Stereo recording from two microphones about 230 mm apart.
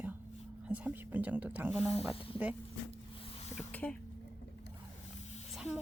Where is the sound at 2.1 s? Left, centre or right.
Left.